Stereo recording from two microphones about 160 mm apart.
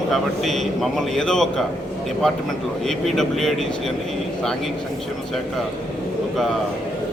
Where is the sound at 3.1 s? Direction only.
5° left (ahead or behind).